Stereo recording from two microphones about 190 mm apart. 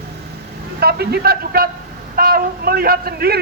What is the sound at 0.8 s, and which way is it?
A man's voice, 55° right (ahead or behind).